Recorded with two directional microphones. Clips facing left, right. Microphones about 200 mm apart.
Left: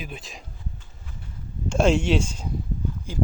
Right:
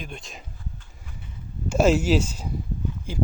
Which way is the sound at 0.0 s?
5° left (ahead or behind).